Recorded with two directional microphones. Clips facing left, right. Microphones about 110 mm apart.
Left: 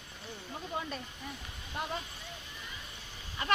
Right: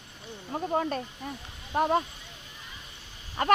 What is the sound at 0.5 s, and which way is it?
Speech, 50° right (ahead or behind).